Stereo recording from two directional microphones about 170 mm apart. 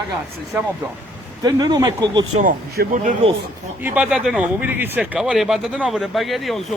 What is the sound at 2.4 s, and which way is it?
Speech, 50° right (ahead or behind).